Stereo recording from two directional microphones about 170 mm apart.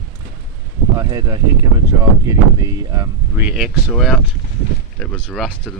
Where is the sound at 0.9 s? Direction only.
20° right (ahead or behind).